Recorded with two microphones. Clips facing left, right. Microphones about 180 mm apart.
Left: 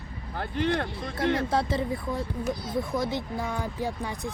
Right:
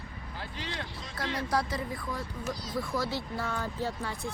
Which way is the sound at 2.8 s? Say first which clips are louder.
Left 2 dB; 20° left (ahead or behind).